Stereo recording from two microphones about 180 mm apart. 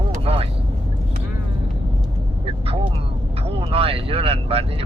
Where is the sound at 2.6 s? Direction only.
35° right (ahead or behind).